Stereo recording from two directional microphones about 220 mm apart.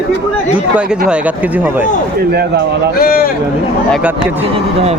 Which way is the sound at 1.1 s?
5° right (ahead or behind).